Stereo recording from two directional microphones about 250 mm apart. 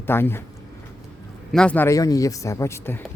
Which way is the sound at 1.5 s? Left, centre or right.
Centre.